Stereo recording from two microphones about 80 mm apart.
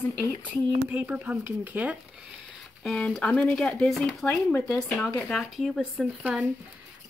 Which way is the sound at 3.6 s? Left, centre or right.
Centre.